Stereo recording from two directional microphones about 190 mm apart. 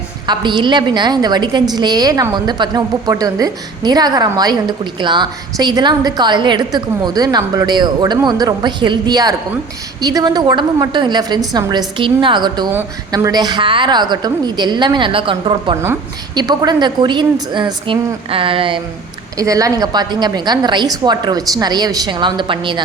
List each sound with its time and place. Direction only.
0.3 s a woman's voice: 25° right (ahead or behind)